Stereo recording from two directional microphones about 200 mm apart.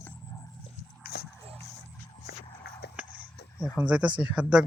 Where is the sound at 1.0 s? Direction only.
50° left (ahead or behind).